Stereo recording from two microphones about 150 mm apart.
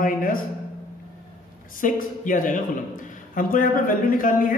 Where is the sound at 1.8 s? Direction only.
60° left (ahead or behind).